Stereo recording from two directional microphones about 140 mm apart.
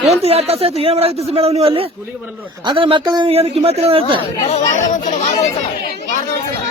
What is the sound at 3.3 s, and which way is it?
Speech, 45° right (ahead or behind).